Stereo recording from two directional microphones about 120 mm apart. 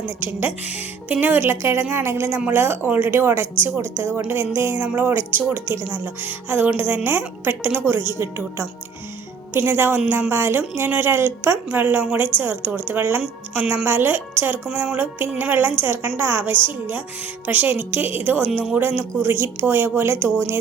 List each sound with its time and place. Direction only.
0.3 s a woman's voice: 15° right (ahead or behind)